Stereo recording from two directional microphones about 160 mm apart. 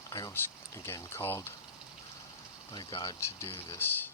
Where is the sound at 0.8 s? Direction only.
15° left (ahead or behind).